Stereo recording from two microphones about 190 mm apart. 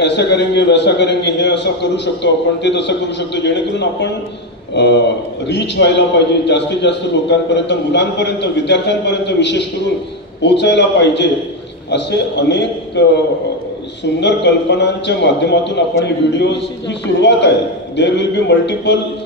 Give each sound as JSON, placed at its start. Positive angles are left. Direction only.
{"t": 0.0, "sound": "a man's voice", "side_deg": 65}
{"t": 14.2, "sound": "a man's voice", "side_deg": 65}